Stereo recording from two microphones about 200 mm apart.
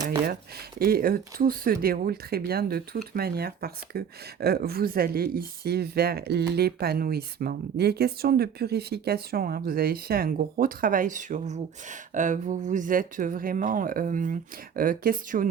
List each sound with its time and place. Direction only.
0.8 s speech: 50° right (ahead or behind)